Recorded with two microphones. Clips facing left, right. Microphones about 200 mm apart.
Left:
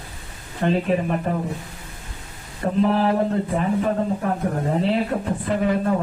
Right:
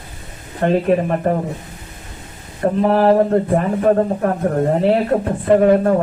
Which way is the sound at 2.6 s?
60° right (ahead or behind).